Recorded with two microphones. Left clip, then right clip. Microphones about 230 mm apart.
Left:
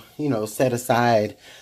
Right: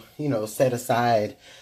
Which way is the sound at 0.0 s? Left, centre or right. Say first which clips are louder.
Left 2 dB; left.